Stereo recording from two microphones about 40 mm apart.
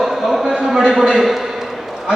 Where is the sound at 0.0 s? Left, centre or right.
Centre.